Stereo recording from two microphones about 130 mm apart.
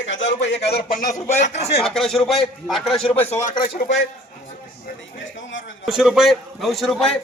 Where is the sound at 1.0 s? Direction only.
30° left (ahead or behind).